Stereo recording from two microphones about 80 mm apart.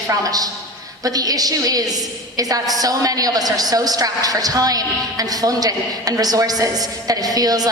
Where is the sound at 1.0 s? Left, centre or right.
Right.